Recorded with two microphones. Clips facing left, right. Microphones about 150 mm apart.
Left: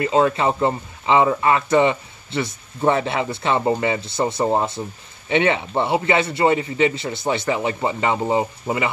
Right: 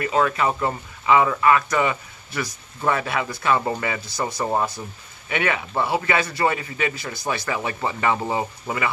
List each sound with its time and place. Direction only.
0.0 s speech: 25° left (ahead or behind)